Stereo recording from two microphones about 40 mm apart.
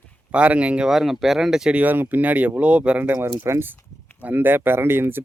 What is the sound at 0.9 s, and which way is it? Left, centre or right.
Speech, centre.